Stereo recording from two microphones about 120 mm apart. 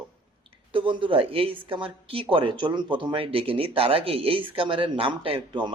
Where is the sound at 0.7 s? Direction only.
45° right (ahead or behind).